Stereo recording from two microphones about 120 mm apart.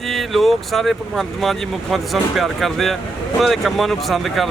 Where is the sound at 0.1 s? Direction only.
Centre (ahead or behind).